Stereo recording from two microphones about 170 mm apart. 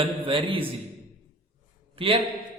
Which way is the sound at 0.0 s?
30° right (ahead or behind).